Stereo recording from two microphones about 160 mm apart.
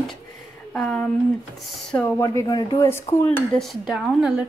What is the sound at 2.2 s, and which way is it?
A woman's voice, 25° left (ahead or behind).